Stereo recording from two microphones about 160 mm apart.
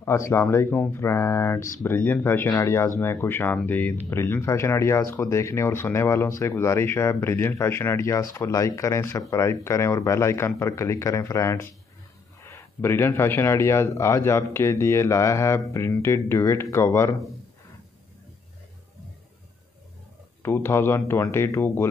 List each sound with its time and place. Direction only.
0.0 s speech: 15° left (ahead or behind)
20.4 s speech: 15° left (ahead or behind)